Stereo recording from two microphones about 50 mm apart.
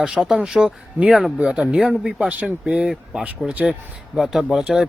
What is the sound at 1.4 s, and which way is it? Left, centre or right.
Speech, right.